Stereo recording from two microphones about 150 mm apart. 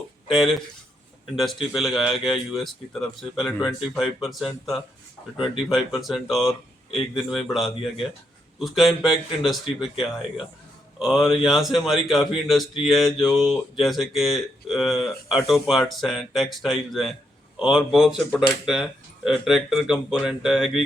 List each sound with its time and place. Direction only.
0.3 s a man's voice: centre (ahead or behind)
11.0 s a man's voice: centre (ahead or behind)